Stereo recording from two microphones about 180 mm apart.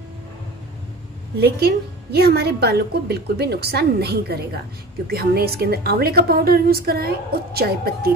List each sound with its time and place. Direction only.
1.4 s a woman's voice: 65° right (ahead or behind)